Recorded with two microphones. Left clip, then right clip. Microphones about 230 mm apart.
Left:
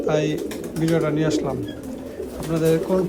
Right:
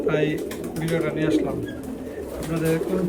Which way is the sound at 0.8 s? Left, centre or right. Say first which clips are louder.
Left 4 dB; left.